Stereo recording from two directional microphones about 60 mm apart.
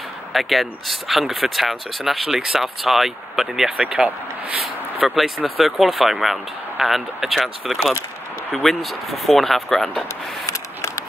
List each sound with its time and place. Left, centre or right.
0.3 s speech: centre
3.7 s speech: centre
5.0 s speech: centre
10.4 s a sound: left